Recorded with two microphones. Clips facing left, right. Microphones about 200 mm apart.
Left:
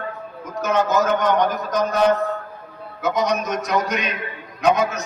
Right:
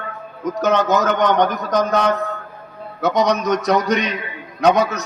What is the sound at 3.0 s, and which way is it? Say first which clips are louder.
Speech: right 4 dB; 70° right (ahead or behind).